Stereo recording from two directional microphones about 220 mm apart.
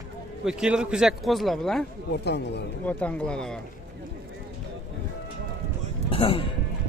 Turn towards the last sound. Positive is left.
turn(degrees=25)  # may be behind; listen again after turning